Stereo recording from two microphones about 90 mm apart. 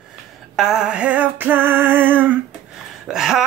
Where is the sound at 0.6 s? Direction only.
5° right (ahead or behind).